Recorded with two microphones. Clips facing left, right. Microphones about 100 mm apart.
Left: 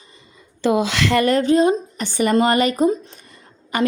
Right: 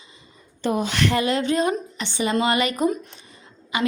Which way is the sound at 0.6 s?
90° left.